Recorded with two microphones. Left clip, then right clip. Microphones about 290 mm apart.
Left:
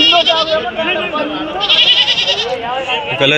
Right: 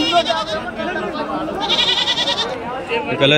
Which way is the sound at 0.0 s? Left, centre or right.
Right.